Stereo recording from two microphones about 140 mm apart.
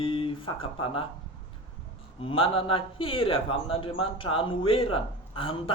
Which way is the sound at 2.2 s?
40° left (ahead or behind).